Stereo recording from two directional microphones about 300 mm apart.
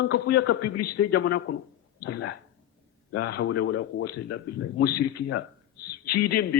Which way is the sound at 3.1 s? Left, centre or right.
Left.